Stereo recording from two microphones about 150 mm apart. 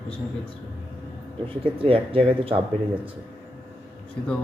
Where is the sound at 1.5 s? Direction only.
35° right (ahead or behind).